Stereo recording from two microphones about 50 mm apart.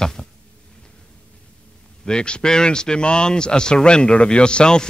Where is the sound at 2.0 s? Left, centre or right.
Centre.